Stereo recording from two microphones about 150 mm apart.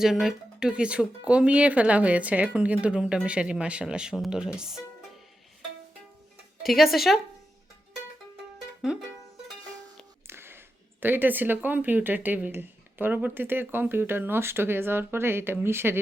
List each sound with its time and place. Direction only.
0.0 s speech: 5° right (ahead or behind)
6.6 s speech: centre (ahead or behind)
8.8 s music: centre (ahead or behind)
10.2 s a sound: 15° right (ahead or behind)
11.0 s speech: 15° right (ahead or behind)